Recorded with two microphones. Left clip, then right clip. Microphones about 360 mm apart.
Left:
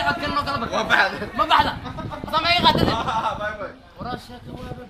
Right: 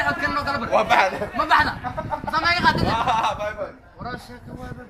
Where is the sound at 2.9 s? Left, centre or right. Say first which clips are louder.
Right 3 dB; right.